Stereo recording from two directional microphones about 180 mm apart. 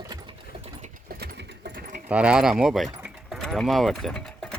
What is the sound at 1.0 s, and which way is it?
Engine, 65° right (ahead or behind).